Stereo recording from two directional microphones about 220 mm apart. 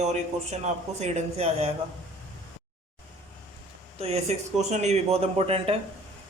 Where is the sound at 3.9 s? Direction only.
30° right (ahead or behind).